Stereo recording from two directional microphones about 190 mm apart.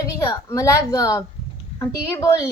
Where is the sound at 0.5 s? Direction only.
15° left (ahead or behind).